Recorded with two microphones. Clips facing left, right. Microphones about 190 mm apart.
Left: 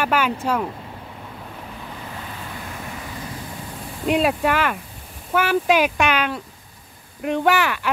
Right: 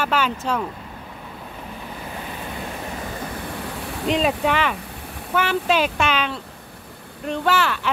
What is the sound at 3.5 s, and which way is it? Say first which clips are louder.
Vehicle: right 4 dB; 75° right (ahead or behind).